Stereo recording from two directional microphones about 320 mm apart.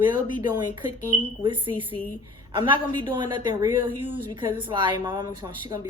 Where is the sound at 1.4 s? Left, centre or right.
Centre.